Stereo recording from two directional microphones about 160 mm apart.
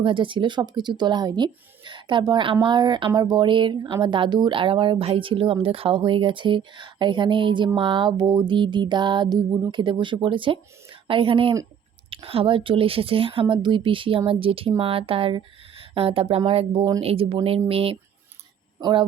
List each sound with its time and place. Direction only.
0.0 s speech: 30° right (ahead or behind)
7.8 s music: 30° right (ahead or behind)
9.7 s speech: 30° right (ahead or behind)